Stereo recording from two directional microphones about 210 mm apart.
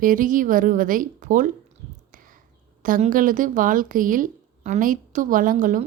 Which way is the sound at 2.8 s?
40° right (ahead or behind).